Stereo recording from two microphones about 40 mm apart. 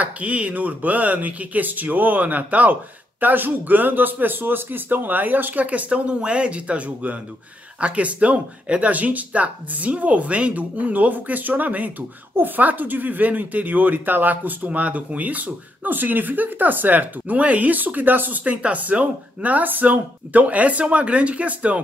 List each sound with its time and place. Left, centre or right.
0.0 s speech: right
5.9 s speech: right
18.4 s speech: right